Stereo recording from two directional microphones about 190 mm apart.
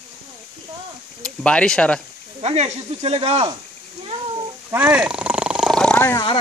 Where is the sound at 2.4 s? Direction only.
35° right (ahead or behind).